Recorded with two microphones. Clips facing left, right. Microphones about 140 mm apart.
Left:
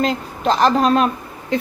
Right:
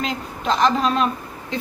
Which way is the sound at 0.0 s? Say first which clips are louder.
Left 6 dB; 45° left (ahead or behind).